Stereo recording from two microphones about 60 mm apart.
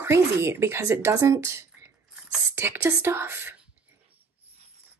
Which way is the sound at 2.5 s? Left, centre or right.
Right.